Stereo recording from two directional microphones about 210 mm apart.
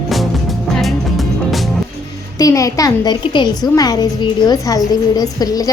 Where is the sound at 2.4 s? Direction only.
15° left (ahead or behind).